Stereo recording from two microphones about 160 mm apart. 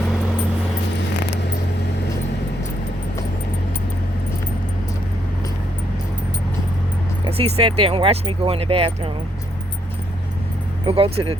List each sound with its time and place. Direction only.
7.3 s speech: 40° right (ahead or behind)
10.8 s speech: 35° right (ahead or behind)